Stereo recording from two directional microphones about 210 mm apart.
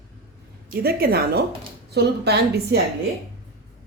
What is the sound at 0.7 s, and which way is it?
Speech, 45° right (ahead or behind).